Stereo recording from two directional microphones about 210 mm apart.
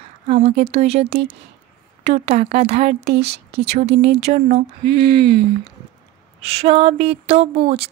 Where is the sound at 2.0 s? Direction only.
30° right (ahead or behind).